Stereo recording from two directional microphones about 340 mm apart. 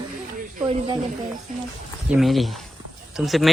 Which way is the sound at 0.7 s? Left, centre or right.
Centre.